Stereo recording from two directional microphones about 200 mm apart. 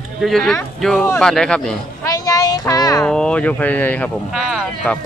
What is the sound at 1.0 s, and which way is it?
Speech, 15° left (ahead or behind).